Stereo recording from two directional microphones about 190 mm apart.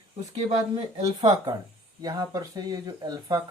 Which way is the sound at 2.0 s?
20° right (ahead or behind).